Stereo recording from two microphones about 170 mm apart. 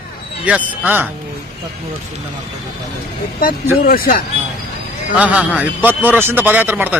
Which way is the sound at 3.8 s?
60° left (ahead or behind).